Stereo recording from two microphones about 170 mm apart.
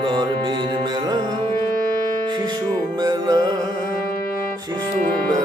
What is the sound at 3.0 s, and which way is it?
Music, 20° right (ahead or behind).